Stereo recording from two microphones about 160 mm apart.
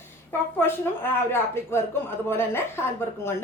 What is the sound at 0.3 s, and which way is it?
Speech, 15° left (ahead or behind).